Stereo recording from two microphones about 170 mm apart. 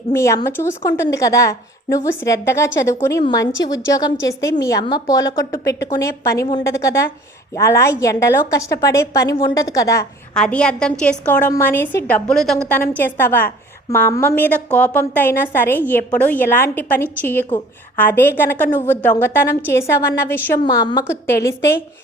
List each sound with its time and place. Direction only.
0.1 s a woman's voice: 15° left (ahead or behind)
10.3 s a woman's voice: 5° left (ahead or behind)
20.7 s a woman's voice: 25° left (ahead or behind)